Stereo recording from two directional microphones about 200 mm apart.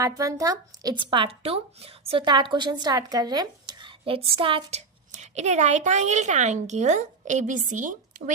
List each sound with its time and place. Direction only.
0.0 s a woman's voice: 15° right (ahead or behind); by 8.2 s 40° right (ahead or behind)